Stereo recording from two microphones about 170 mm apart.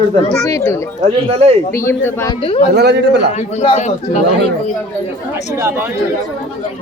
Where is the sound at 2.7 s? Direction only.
75° right (ahead or behind).